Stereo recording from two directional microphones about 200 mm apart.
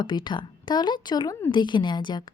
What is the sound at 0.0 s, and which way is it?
A woman's voice, 20° left (ahead or behind).